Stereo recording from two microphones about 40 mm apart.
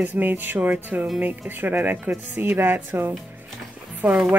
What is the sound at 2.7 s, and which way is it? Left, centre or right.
Speech, right.